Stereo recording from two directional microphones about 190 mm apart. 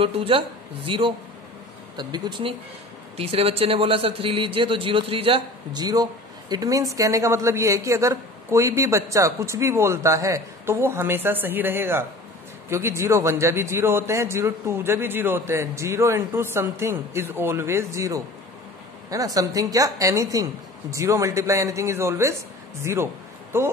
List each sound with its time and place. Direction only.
0.0 s a man's voice: 30° right (ahead or behind)